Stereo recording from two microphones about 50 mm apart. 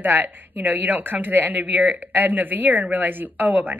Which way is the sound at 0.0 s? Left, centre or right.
Right.